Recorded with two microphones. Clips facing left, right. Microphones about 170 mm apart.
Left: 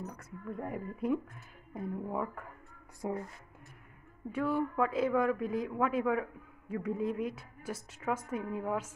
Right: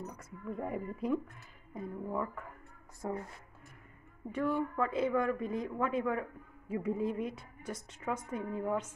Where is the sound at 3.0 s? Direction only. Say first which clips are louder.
Left 2 dB; 15° left (ahead or behind).